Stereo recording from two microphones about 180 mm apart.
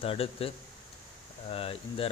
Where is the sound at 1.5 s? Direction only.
30° left (ahead or behind).